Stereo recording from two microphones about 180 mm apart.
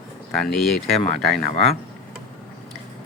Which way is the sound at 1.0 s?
40° left (ahead or behind).